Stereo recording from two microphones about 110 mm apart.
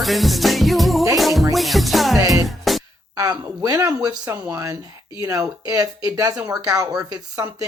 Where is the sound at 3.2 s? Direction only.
35° right (ahead or behind).